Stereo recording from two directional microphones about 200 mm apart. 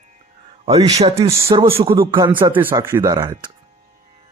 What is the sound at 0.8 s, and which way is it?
Speech, 20° right (ahead or behind).